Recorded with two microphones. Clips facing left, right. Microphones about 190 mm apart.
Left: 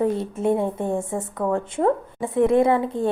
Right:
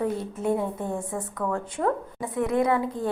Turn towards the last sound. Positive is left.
turn(degrees=25)  # may be behind; listen again after turning